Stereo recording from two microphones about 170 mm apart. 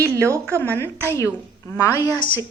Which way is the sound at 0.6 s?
15° left (ahead or behind).